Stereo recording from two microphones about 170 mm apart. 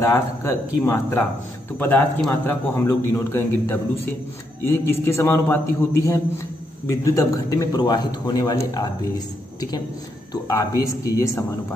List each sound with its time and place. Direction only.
0.0 s a man's voice: 15° left (ahead or behind)